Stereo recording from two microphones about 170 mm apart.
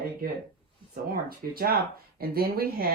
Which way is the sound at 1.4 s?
55° right (ahead or behind).